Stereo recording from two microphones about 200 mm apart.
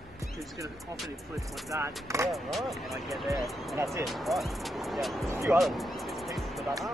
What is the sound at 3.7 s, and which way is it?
Speech, 15° right (ahead or behind).